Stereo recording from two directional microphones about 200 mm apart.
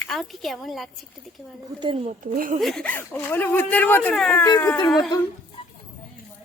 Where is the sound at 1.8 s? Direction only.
25° right (ahead or behind).